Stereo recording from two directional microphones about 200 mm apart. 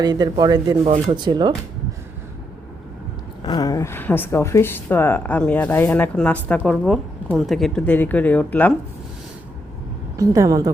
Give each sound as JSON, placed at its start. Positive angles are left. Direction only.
{"t": 0.0, "sound": "speech", "side_deg": -20}
{"t": 3.4, "sound": "speech", "side_deg": 20}
{"t": 10.2, "sound": "a woman's voice", "side_deg": -15}